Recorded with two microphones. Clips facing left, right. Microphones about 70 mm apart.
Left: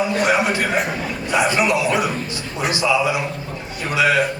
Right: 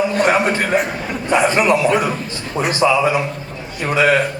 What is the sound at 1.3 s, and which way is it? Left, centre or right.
A man's voice, right.